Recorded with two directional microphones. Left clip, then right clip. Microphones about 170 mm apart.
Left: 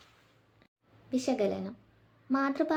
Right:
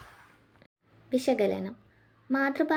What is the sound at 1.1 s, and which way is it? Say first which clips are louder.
A woman's voice: right 4 dB; 10° right (ahead or behind).